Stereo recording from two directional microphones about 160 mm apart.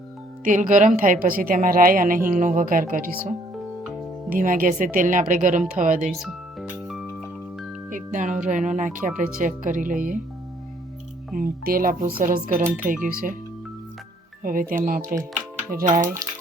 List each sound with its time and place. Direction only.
0.4 s a woman's voice: 55° right (ahead or behind)
6.1 s music: centre (ahead or behind)
7.9 s a woman's voice: 55° right (ahead or behind)
11.3 s a woman's voice: 65° right (ahead or behind)
14.4 s a woman's voice: 60° right (ahead or behind)